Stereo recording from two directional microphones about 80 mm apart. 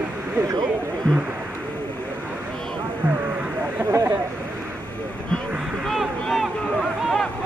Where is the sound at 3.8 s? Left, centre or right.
Right.